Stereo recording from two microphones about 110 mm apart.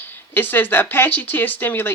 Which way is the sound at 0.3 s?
20° left (ahead or behind).